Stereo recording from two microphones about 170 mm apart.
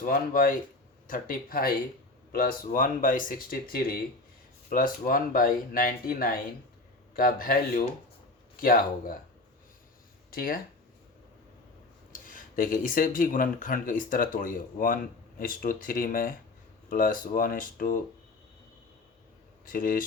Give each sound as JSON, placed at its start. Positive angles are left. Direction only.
{"t": 0.0, "sound": "speech", "side_deg": 55}
{"t": 10.3, "sound": "speech", "side_deg": 60}
{"t": 12.2, "sound": "speech", "side_deg": 50}
{"t": 19.6, "sound": "speech", "side_deg": 55}